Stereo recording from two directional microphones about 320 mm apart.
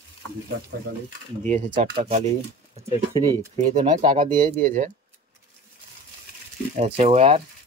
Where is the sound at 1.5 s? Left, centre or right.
Right.